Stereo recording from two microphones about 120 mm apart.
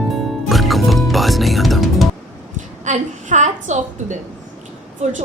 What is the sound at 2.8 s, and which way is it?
A woman's voice, 85° right.